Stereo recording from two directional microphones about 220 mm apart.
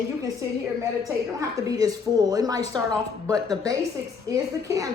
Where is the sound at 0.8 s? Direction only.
15° right (ahead or behind).